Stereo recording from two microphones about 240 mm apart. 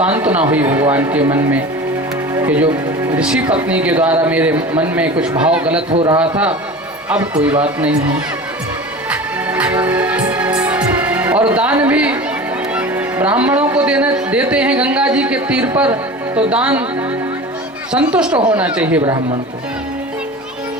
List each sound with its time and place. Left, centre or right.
0.0 s a man's voice: centre
3.2 s a man's voice: centre
5.9 s speech: right
6.1 s a man's voice: centre
9.0 s music: centre
12.7 s a man's voice: centre
17.9 s a man's voice: centre